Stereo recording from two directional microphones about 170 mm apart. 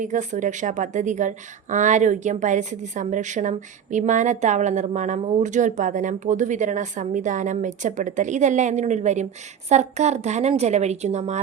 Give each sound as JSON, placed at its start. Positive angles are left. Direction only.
{"t": 0.0, "sound": "a woman's voice", "side_deg": -45}